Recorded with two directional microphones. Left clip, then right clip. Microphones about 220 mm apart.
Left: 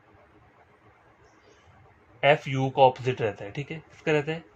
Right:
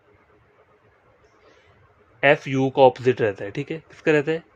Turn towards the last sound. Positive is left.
turn(degrees=-55)  # may be behind; listen again after turning